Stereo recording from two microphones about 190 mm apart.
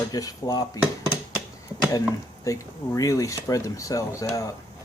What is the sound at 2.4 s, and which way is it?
Speech, 15° left (ahead or behind).